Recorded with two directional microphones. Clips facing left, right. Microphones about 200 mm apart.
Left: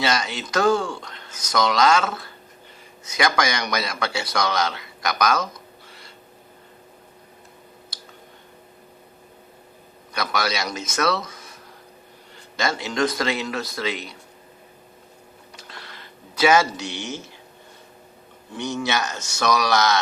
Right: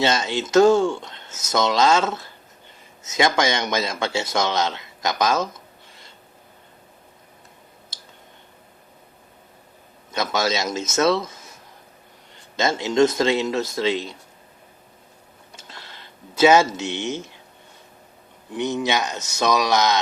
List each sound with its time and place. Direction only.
0.0 s a man's voice: 25° right (ahead or behind)
10.1 s speech: 25° right (ahead or behind)
12.5 s speech: 20° right (ahead or behind)
15.5 s a sound: 25° right (ahead or behind)
18.5 s speech: 20° right (ahead or behind)